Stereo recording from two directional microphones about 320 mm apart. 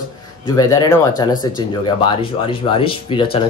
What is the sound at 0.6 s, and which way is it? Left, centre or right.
Speech, centre.